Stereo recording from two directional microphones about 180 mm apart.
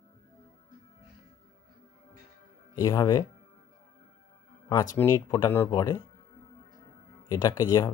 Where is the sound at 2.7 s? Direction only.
20° left (ahead or behind).